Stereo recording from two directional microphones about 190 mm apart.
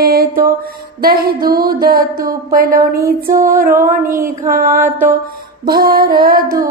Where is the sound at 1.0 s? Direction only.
50° right (ahead or behind).